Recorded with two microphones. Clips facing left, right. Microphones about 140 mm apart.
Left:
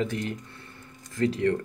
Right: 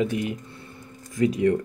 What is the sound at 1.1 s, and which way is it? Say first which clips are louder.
Speech: right 4 dB; 15° right (ahead or behind).